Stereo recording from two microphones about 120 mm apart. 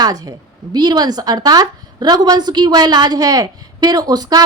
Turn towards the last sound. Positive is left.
turn(degrees=-35)  # may be behind; listen again after turning